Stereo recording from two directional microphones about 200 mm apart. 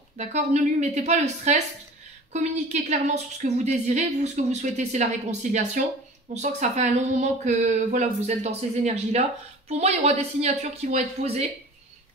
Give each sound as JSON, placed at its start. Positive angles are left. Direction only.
{"t": 0.2, "sound": "a woman's voice", "side_deg": -35}